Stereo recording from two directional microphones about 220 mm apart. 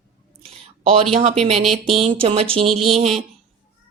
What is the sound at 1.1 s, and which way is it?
Speech, 30° right (ahead or behind).